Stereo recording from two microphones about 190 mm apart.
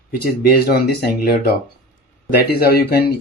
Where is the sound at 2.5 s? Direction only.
55° left (ahead or behind).